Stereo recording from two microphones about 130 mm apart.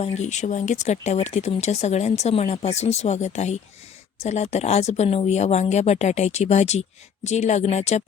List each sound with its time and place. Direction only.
0.0 s speech: 60° left (ahead or behind)